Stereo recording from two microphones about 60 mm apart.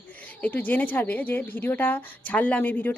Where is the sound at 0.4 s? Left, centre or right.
Left.